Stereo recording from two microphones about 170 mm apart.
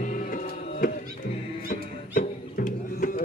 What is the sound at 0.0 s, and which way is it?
Music, 50° left (ahead or behind).